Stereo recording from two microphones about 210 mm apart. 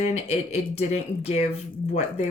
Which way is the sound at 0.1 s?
30° left (ahead or behind).